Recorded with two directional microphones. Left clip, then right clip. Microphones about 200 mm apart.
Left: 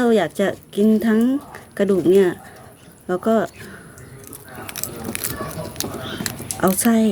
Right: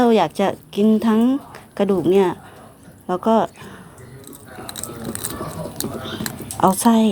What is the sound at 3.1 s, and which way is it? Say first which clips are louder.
Speech: right 2 dB; 60° left (ahead or behind).